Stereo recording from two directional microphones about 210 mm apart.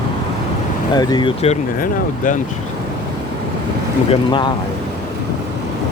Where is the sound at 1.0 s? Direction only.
20° left (ahead or behind).